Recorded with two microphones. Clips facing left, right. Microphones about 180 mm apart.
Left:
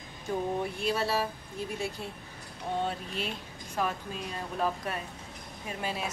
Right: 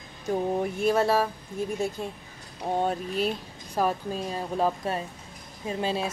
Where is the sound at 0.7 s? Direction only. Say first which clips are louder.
Right 10 dB; 50° right (ahead or behind).